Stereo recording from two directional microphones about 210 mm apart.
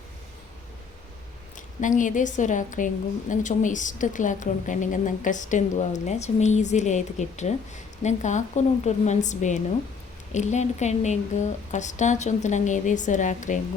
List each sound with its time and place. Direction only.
1.5 s a woman's voice: 35° left (ahead or behind)